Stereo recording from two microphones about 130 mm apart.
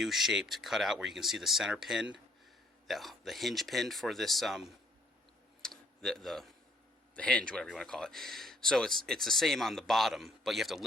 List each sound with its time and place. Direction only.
0.0 s speech: centre (ahead or behind)
5.6 s tick-tock: 5° left (ahead or behind)
7.2 s speech: 10° left (ahead or behind)